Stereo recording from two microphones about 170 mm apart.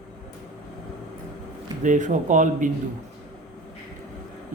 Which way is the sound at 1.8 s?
45° right (ahead or behind).